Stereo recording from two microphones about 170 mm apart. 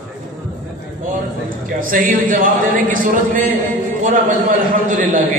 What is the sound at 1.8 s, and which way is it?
A man's voice, 55° right (ahead or behind).